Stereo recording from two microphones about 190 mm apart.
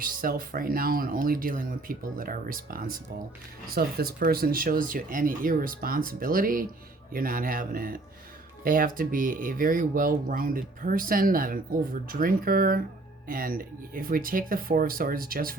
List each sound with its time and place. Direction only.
0.0 s speech: 50° right (ahead or behind)